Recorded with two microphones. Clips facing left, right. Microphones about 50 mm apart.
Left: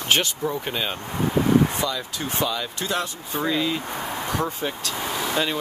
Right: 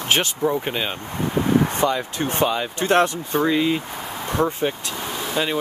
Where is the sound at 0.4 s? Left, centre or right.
Centre.